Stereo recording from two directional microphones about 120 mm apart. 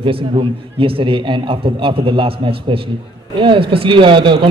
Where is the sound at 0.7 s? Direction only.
50° right (ahead or behind).